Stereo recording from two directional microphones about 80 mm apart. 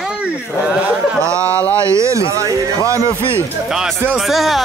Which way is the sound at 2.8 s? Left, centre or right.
Right.